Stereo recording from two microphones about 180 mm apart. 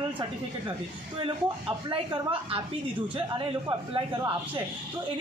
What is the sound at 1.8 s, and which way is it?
Speech, 25° right (ahead or behind).